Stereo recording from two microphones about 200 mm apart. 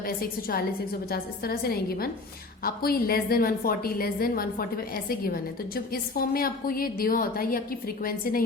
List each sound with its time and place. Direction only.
0.0 s a woman's voice: 50° left (ahead or behind)